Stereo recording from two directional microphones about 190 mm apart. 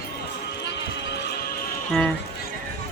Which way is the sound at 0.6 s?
70° left (ahead or behind).